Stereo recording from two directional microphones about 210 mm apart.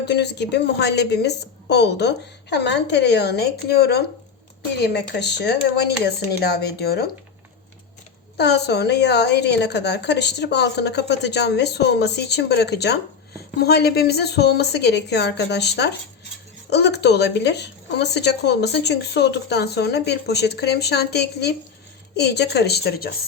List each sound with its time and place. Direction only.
0.0 s a woman's voice: 55° left (ahead or behind)
8.4 s a woman's voice: 50° left (ahead or behind)